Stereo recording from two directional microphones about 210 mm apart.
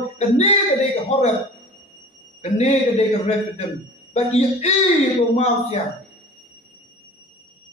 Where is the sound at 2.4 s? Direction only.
30° left (ahead or behind).